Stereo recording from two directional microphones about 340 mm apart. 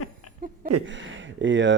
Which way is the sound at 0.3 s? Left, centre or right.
Left.